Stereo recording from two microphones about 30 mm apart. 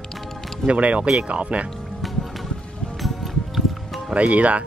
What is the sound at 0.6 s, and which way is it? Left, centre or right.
Speech, right.